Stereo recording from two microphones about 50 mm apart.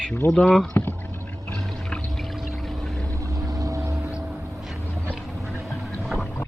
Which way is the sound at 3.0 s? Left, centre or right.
Right.